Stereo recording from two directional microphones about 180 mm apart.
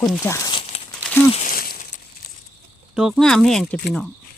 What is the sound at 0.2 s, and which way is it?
Speech, 15° left (ahead or behind).